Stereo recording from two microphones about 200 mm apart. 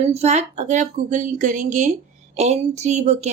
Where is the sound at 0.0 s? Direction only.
35° right (ahead or behind).